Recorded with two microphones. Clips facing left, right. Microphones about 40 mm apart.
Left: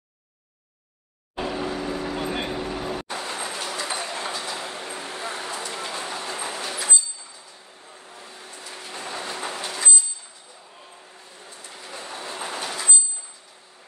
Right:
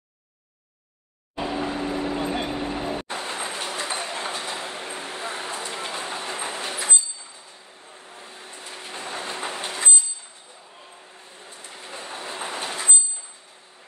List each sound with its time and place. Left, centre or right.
1.4 s vehicle: right
2.5 s train: right
7.8 s train: right
11.1 s train: right